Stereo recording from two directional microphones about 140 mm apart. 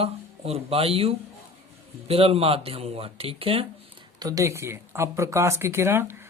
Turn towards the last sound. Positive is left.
turn(degrees=-15)  # may be behind; listen again after turning